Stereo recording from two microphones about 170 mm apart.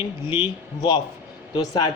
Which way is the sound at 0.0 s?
30° left (ahead or behind).